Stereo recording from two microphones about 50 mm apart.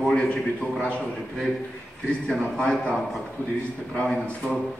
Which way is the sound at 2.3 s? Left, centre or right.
Centre.